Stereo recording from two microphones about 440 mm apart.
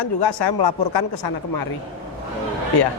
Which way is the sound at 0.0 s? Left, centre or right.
Left.